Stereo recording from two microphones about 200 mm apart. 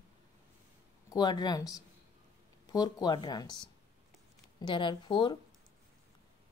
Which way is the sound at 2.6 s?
20° left (ahead or behind).